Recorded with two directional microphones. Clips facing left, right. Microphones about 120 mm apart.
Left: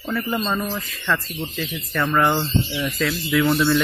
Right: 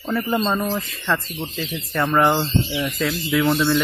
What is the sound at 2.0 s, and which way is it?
Speech, 15° right (ahead or behind).